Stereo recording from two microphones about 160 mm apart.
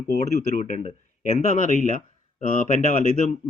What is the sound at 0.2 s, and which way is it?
Speech, 45° left (ahead or behind).